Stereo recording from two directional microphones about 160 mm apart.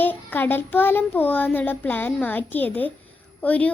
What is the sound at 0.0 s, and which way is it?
A child's voice, 10° left (ahead or behind).